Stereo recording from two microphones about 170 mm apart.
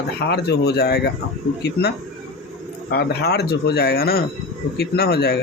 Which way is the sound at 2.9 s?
70° left (ahead or behind).